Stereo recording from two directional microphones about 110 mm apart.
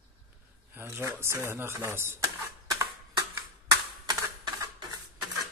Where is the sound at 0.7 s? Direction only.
20° right (ahead or behind).